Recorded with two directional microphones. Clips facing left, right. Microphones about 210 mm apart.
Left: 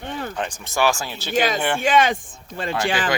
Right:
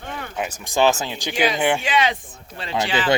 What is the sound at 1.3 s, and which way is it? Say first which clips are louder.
Speech: left 1 dB; 45° left (ahead or behind).